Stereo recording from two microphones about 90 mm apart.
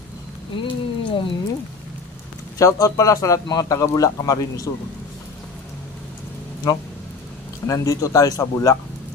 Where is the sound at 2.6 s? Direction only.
40° left (ahead or behind).